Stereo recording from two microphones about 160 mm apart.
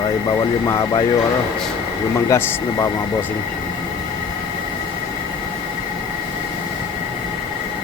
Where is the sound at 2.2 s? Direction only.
20° left (ahead or behind).